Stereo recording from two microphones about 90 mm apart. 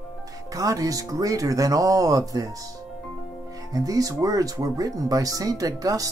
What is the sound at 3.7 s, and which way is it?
Speech, 40° right (ahead or behind).